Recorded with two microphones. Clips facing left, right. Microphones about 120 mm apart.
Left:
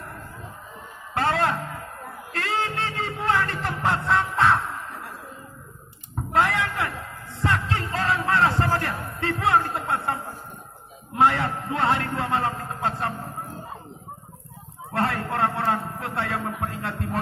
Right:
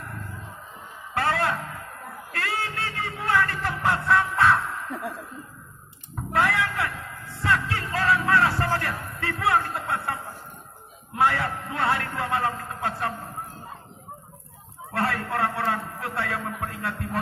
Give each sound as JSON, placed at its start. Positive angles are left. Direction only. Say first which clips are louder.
{"t": 1.1, "sound": "music", "louder": "left 2 dB", "side_deg": 20}
{"t": 6.3, "sound": "a sound", "louder": "left 1 dB", "side_deg": 20}
{"t": 7.4, "sound": "music", "louder": "even", "side_deg": 25}
{"t": 8.6, "sound": "music", "louder": "left 2 dB", "side_deg": 40}
{"t": 9.2, "sound": "speech", "louder": "left 2 dB", "side_deg": 25}
{"t": 11.1, "sound": "a man's voice", "louder": "left 3 dB", "side_deg": 20}
{"t": 14.9, "sound": "a man's voice", "louder": "left 1 dB", "side_deg": 30}